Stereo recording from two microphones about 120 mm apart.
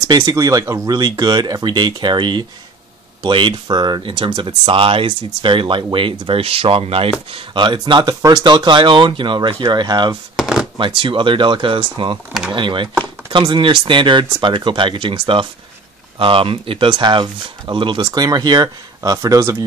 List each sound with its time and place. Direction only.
0.1 s speech: 35° right (ahead or behind)
10.3 s a sound: 5° right (ahead or behind)
10.8 s speech: 45° right (ahead or behind); by 19.5 s 30° right (ahead or behind)